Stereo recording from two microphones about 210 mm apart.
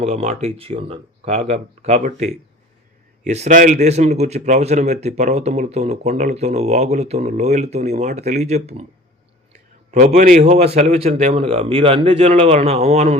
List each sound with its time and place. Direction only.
0.0 s speech: 35° right (ahead or behind)
9.9 s a man's voice: 35° right (ahead or behind)